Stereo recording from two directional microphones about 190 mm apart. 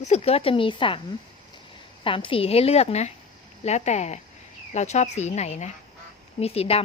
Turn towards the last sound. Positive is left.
turn(degrees=30)  # may be behind; listen again after turning